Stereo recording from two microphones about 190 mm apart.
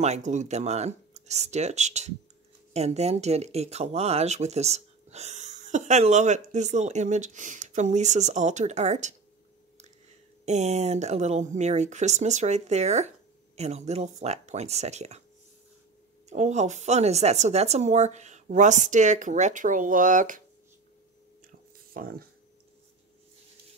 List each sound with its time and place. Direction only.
0.0 s speech: 35° right (ahead or behind)
10.4 s speech: 35° right (ahead or behind)
16.3 s speech: 35° right (ahead or behind)
21.5 s a sound: 50° right (ahead or behind)